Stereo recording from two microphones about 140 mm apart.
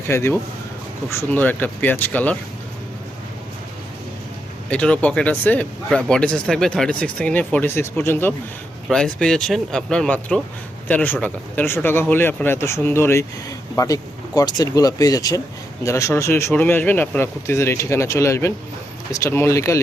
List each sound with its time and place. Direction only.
0.1 s speech: 20° left (ahead or behind)
4.7 s speech: 10° left (ahead or behind)
8.9 s speech: 5° left (ahead or behind); by 19.8 s 20° left (ahead or behind)